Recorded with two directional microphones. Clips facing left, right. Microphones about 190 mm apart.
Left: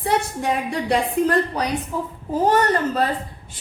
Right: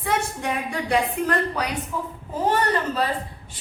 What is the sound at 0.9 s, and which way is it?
A man's voice, 35° left (ahead or behind).